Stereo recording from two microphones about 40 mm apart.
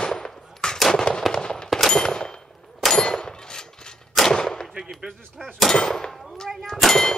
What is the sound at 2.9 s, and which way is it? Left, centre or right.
Clang, centre.